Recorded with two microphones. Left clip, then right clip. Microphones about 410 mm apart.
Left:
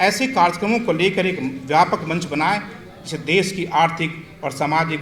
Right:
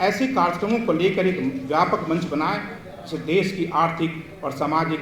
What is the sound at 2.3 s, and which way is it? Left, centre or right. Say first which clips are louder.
A man's voice: left 4 dB; left.